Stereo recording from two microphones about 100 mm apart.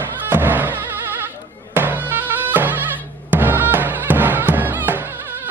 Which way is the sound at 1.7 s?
20° right (ahead or behind).